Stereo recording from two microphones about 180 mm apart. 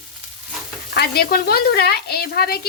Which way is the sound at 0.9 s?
60° left (ahead or behind).